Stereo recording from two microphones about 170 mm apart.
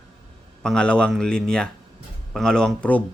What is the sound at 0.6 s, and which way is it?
Speech, 5° left (ahead or behind).